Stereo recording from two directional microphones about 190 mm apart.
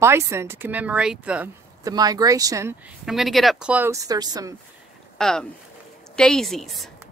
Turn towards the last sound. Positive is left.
turn(degrees=0)  # may be behind; listen again after turning